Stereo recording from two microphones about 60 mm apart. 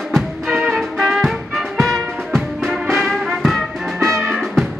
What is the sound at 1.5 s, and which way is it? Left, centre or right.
Music, centre.